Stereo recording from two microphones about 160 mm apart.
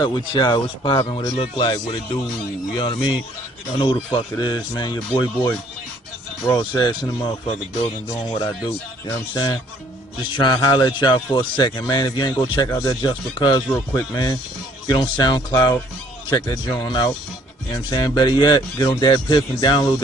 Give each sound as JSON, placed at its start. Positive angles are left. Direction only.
{"t": 0.0, "sound": "speech", "side_deg": 25}
{"t": 6.4, "sound": "speech", "side_deg": 25}